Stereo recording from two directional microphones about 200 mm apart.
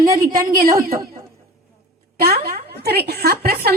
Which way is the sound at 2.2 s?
50° right (ahead or behind).